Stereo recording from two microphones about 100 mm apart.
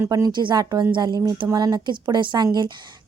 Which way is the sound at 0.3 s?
50° right (ahead or behind).